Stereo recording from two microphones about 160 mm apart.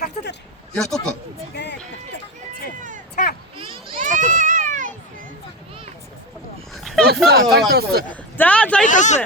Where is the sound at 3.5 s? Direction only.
35° right (ahead or behind).